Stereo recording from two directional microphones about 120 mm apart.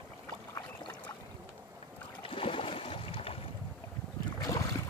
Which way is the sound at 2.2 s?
50° left (ahead or behind).